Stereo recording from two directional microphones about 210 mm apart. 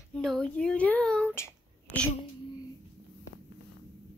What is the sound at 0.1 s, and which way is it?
Speech, centre (ahead or behind).